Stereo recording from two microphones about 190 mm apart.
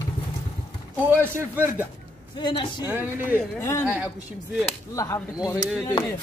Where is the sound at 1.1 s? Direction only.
10° right (ahead or behind).